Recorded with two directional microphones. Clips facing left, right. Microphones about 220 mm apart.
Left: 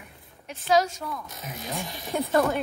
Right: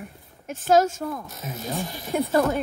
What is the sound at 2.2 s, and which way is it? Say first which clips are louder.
Speech: right 1 dB; centre (ahead or behind).